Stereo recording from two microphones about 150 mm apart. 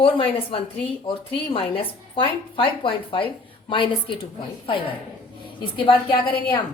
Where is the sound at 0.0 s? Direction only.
40° left (ahead or behind).